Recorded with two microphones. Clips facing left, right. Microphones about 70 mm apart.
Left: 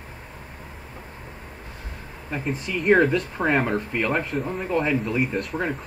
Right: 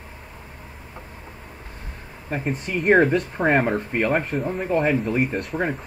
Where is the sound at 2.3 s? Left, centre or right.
Right.